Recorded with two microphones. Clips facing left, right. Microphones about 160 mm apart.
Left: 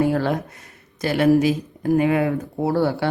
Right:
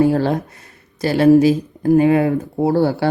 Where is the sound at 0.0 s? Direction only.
30° right (ahead or behind).